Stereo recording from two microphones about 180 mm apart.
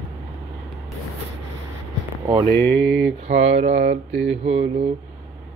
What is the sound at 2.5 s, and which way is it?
Mantra, 75° right (ahead or behind).